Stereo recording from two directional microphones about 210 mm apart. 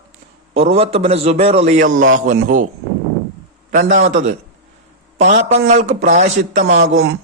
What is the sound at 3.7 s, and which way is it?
Speech, 35° right (ahead or behind).